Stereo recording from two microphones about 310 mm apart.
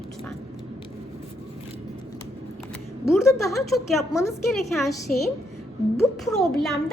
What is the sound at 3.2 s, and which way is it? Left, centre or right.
A woman's voice, centre.